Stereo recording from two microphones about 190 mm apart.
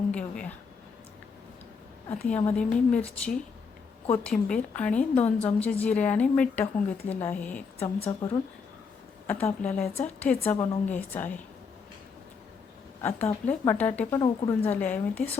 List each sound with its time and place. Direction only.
0.1 s a woman's voice: 5° left (ahead or behind)
2.0 s a woman's voice: 10° left (ahead or behind)
7.8 s a woman's voice: 30° left (ahead or behind)
9.2 s a woman's voice: 10° left (ahead or behind)
13.0 s a woman's voice: 10° left (ahead or behind)
14.2 s a woman's voice: 20° left (ahead or behind)
14.7 s a woman's voice: 10° left (ahead or behind)